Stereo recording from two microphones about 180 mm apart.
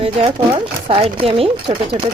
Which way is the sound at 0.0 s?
30° right (ahead or behind).